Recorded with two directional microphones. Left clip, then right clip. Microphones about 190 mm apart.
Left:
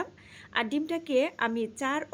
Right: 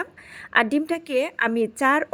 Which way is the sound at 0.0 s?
35° right (ahead or behind).